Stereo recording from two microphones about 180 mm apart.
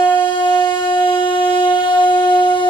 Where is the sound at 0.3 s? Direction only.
25° left (ahead or behind).